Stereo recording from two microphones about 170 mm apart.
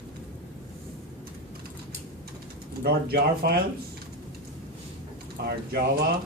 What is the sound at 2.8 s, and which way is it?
Speech, 65° right (ahead or behind).